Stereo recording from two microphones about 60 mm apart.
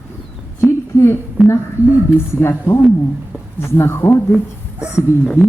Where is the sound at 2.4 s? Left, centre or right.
Left.